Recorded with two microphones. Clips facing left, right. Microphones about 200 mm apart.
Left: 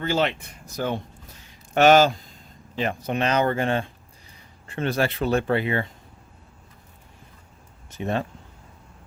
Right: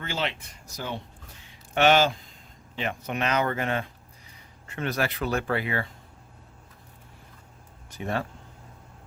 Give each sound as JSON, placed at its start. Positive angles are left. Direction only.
{"t": 0.0, "sound": "speech", "side_deg": 40}
{"t": 0.3, "sound": "speech", "side_deg": 55}
{"t": 1.4, "sound": "a sound", "side_deg": 40}
{"t": 2.7, "sound": "speech", "side_deg": 35}
{"t": 7.9, "sound": "speech", "side_deg": 25}